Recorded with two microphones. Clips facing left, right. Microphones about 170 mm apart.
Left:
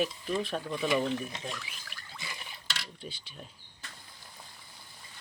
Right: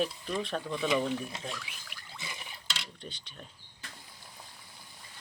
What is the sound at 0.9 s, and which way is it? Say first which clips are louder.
Stir: left 1 dB; 10° right (ahead or behind).